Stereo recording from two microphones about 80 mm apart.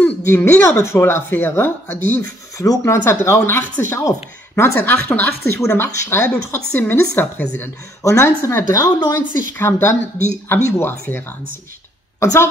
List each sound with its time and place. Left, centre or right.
0.0 s a sound: left
0.6 s speech: left
2.5 s speech: left
5.6 s speech: left
8.0 s speech: left
8.7 s speech: left
9.5 s speech: left
12.2 s a woman's voice: left